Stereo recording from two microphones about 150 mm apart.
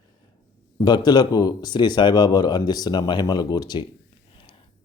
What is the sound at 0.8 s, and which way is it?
Speech, 30° left (ahead or behind).